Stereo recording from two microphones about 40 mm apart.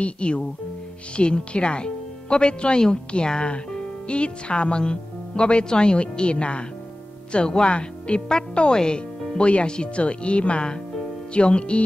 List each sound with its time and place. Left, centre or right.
0.0 s speech: left